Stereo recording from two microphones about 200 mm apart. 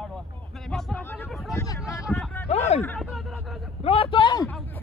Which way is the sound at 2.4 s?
30° left (ahead or behind).